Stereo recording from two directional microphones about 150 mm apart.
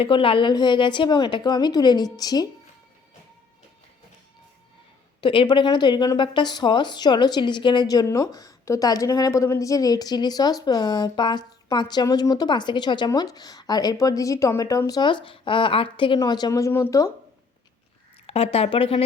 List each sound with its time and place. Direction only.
0.0 s a woman's voice: 35° left (ahead or behind)
5.2 s a woman's voice: 35° left (ahead or behind); by 17.1 s 20° left (ahead or behind)
18.3 s a woman's voice: 40° left (ahead or behind)